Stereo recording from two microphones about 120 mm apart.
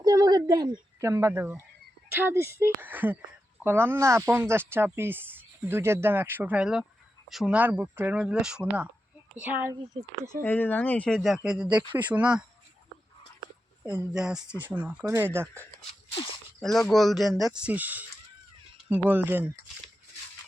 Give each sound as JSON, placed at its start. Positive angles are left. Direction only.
{"t": 0.0, "sound": "speech", "side_deg": -30}
{"t": 10.4, "sound": "speech", "side_deg": 15}
{"t": 14.2, "sound": "speech", "side_deg": -5}
{"t": 15.0, "sound": "speech", "side_deg": -25}
{"t": 16.6, "sound": "speech", "side_deg": 0}